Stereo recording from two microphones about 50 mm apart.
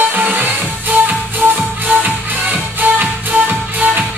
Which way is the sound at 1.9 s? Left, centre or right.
Right.